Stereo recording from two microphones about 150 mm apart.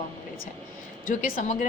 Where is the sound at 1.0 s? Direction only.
60° left (ahead or behind).